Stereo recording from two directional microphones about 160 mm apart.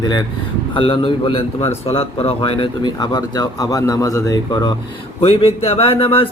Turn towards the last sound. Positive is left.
turn(degrees=35)  # may be behind; listen again after turning